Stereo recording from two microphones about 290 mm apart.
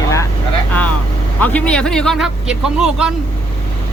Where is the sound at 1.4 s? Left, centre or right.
Centre.